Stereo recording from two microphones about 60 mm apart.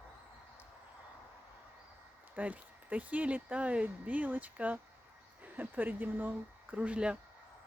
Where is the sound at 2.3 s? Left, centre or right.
Right.